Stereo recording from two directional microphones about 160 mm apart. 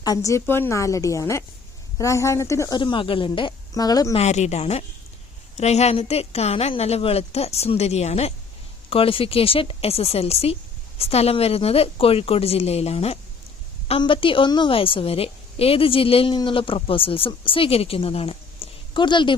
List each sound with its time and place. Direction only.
0.0 s speech: 20° left (ahead or behind)
4.1 s a woman's voice: 45° left (ahead or behind)